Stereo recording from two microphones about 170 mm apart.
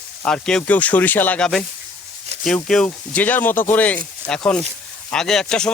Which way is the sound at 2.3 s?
40° right (ahead or behind).